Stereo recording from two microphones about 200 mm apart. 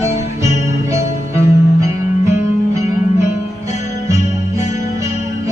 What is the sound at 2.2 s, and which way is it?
Music, 35° left (ahead or behind).